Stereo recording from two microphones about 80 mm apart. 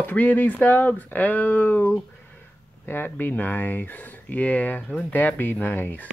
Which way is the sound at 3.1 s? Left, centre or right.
Left.